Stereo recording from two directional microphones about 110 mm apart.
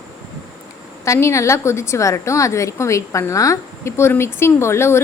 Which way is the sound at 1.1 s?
25° left (ahead or behind).